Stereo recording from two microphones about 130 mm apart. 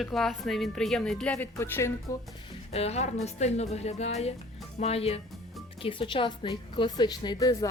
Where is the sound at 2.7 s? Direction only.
55° left (ahead or behind).